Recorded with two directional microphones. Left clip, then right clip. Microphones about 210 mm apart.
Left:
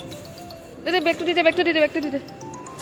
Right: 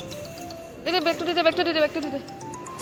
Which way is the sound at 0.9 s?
30° left (ahead or behind).